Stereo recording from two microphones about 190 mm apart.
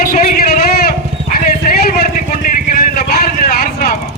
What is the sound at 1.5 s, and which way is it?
Vehicle, 50° left (ahead or behind).